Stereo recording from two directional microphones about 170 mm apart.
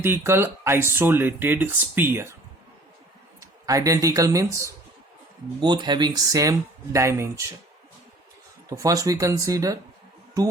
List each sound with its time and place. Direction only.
0.0 s speech: 15° right (ahead or behind)
3.4 s speech: 20° right (ahead or behind)
8.7 s speech: 20° right (ahead or behind)